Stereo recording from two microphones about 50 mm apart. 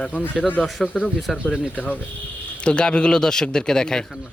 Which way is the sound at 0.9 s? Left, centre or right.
Centre.